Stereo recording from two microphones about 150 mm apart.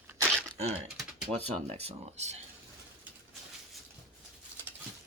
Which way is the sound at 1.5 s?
45° right (ahead or behind).